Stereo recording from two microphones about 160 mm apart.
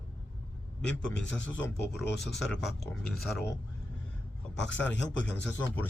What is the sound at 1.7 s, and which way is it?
Speech, 90° left.